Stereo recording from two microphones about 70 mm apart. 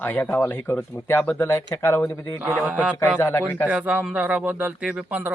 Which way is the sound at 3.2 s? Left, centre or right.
Left.